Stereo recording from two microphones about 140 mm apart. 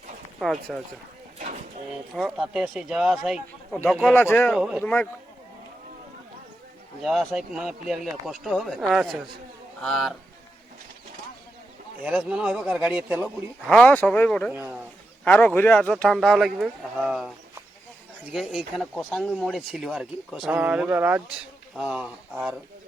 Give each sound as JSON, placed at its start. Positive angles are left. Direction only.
{"t": 0.3, "sound": "speech", "side_deg": 0}
{"t": 2.1, "sound": "speech", "side_deg": 0}
{"t": 4.1, "sound": "speech", "side_deg": 15}
{"t": 4.5, "sound": "a man's voice", "side_deg": -5}
{"t": 4.8, "sound": "speech", "side_deg": 10}
{"t": 7.0, "sound": "speech", "side_deg": 0}
{"t": 12.0, "sound": "a man's voice", "side_deg": -5}
{"t": 13.7, "sound": "speech", "side_deg": 10}
{"t": 18.3, "sound": "speech", "side_deg": 0}